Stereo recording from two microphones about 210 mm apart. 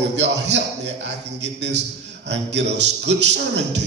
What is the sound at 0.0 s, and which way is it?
Mantra, 55° right (ahead or behind).